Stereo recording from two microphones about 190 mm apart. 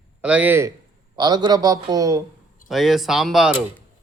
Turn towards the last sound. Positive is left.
turn(degrees=0)  # may be behind; listen again after turning